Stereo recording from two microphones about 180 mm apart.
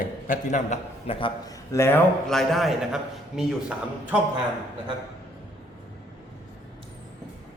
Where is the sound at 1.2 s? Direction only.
25° left (ahead or behind).